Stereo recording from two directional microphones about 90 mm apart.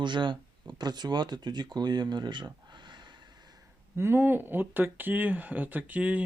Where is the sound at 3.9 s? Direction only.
25° right (ahead or behind).